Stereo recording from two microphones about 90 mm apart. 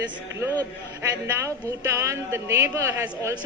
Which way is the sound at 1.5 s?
35° right (ahead or behind).